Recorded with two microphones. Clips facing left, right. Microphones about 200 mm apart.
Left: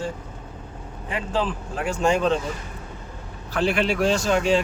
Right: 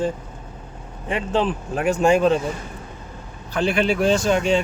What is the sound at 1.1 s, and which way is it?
Speech, 25° right (ahead or behind).